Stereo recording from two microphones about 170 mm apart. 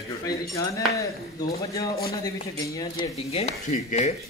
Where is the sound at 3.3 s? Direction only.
35° left (ahead or behind).